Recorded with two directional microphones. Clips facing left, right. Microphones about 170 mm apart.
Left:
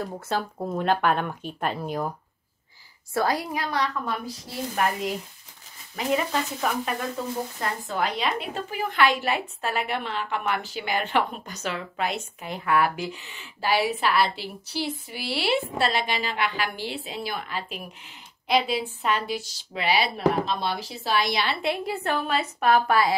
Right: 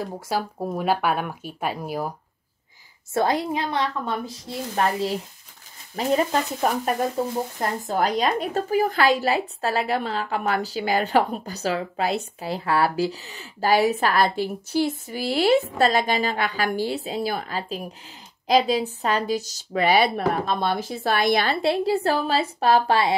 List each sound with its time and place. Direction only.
0.0 s speech: 10° right (ahead or behind)
3.1 s a woman's voice: 25° right (ahead or behind); by 21.5 s 50° right (ahead or behind)
21.5 s a woman's voice: 30° right (ahead or behind)